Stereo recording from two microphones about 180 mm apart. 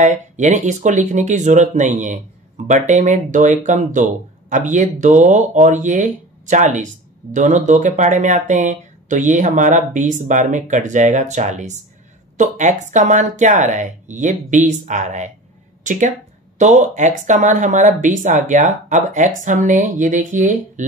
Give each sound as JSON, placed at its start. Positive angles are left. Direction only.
{"t": 0.0, "sound": "a woman's voice", "side_deg": -40}